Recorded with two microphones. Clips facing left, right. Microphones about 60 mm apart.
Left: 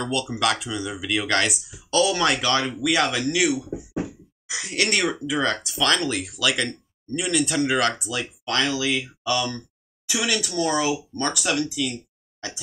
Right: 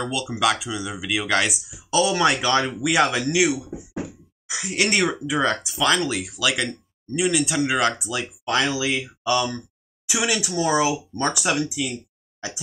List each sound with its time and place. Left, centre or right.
0.0 s speech: centre
2.7 s speech: centre
4.0 s a sound: centre
4.8 s speech: centre
8.2 s speech: centre